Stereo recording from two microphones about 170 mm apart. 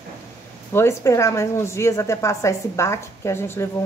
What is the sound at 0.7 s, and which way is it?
A woman's voice, 15° left (ahead or behind).